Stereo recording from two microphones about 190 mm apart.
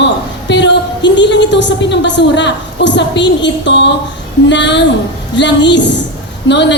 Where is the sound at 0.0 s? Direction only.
65° left (ahead or behind).